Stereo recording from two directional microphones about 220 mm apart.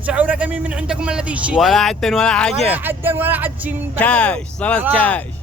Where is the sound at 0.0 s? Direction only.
5° right (ahead or behind).